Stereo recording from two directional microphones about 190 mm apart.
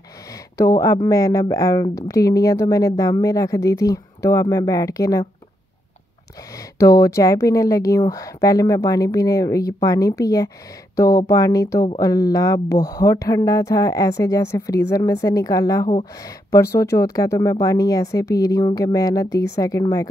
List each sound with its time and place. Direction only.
0.6 s a woman's voice: 15° left (ahead or behind)
6.8 s a woman's voice: 15° left (ahead or behind)